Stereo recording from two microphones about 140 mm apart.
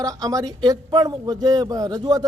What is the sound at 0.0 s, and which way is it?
A man's voice, 25° right (ahead or behind).